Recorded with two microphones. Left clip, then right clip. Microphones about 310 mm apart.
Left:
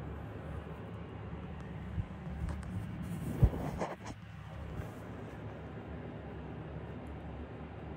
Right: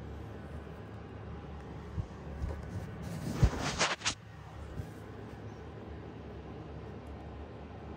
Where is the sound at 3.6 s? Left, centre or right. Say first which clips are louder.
Right 8 dB; left.